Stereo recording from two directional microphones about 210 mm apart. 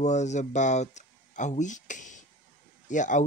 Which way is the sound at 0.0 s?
35° left (ahead or behind).